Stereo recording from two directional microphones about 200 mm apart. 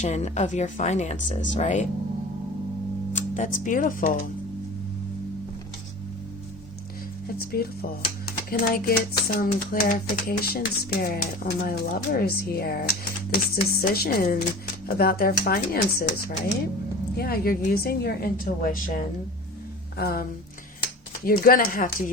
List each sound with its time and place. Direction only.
0.0 s speech: 35° left (ahead or behind)
3.1 s speech: 40° left (ahead or behind)
7.3 s speech: 50° left (ahead or behind)
17.2 s speech: 50° left (ahead or behind)
21.2 s speech: 45° left (ahead or behind)